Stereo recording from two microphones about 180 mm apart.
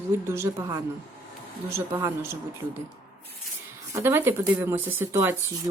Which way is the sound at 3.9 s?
15° right (ahead or behind).